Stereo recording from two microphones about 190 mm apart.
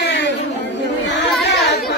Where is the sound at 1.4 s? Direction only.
60° left (ahead or behind).